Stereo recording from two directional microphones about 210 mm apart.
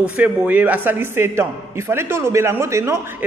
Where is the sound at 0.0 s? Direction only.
5° right (ahead or behind).